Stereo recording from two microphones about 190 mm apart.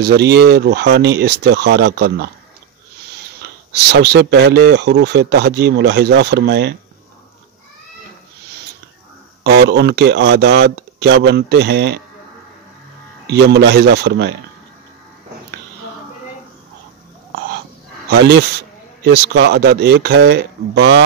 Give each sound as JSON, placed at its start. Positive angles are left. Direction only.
{"t": 0.0, "sound": "speech", "side_deg": -60}
{"t": 3.4, "sound": "speech", "side_deg": -60}
{"t": 9.4, "sound": "speech", "side_deg": -60}
{"t": 13.3, "sound": "speech", "side_deg": -60}
{"t": 18.1, "sound": "speech", "side_deg": -60}